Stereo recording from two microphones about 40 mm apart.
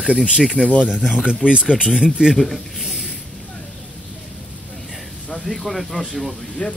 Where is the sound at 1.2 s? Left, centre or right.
Right.